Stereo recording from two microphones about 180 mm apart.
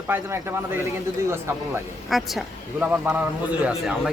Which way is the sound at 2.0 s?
Centre (ahead or behind).